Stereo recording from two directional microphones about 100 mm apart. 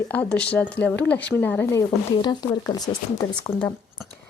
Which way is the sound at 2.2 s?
40° left (ahead or behind).